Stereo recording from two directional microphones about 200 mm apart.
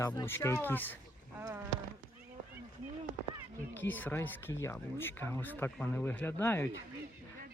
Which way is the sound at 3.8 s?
10° left (ahead or behind).